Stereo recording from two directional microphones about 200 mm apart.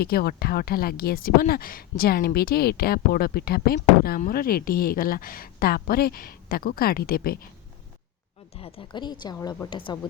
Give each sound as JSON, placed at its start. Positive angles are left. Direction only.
{"t": 0.0, "sound": "speech", "side_deg": 50}
{"t": 8.5, "sound": "a woman's voice", "side_deg": 30}